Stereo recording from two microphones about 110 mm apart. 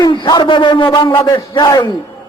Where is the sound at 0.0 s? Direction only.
40° left (ahead or behind).